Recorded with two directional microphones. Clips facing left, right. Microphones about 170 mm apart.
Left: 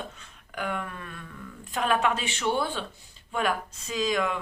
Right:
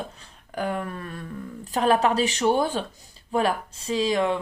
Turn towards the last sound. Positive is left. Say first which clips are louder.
# right 5 dB
turn(degrees=-30)  # may be behind; listen again after turning